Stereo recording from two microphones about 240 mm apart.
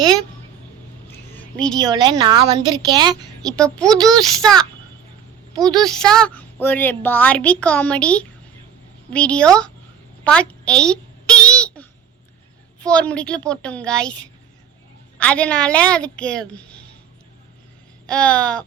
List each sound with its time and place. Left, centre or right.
1.3 s a sound: centre
1.9 s a woman's voice: centre
3.5 s a woman's voice: centre
3.9 s a woman's voice: centre
4.3 s a woman's voice: centre
5.5 s a woman's voice: centre
5.8 s a woman's voice: centre
10.2 s a sound: centre
12.8 s a woman's voice: centre
18.0 s a woman's voice: centre